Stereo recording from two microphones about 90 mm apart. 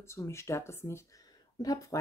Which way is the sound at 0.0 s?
30° left (ahead or behind).